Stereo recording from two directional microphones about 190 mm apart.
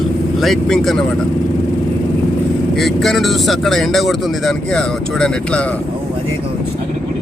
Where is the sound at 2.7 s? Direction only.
Centre (ahead or behind).